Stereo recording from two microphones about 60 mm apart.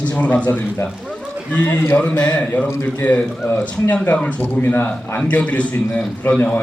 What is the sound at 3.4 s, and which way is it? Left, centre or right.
A man's voice, left.